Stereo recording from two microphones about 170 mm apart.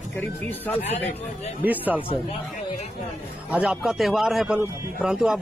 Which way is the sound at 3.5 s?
5° right (ahead or behind).